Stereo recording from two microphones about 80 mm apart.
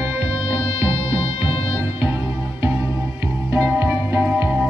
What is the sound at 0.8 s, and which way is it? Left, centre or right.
Music, right.